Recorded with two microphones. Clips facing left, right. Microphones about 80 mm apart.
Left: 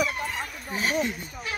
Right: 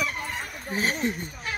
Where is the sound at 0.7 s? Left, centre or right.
Right.